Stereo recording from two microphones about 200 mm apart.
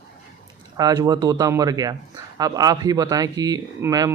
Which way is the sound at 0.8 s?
20° right (ahead or behind).